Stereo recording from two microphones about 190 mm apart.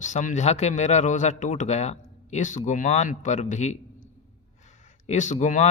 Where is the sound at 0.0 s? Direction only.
40° left (ahead or behind).